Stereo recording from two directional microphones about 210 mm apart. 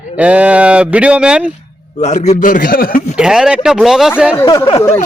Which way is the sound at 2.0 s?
35° left (ahead or behind).